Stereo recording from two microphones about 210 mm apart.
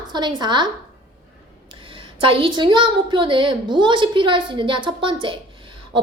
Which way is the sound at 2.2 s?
25° right (ahead or behind).